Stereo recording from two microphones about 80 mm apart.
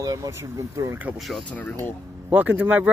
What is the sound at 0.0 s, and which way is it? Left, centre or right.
Speech, right.